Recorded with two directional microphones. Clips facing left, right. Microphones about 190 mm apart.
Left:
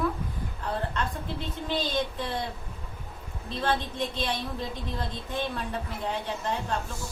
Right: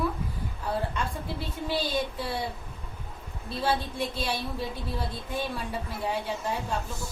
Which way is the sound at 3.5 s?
10° right (ahead or behind).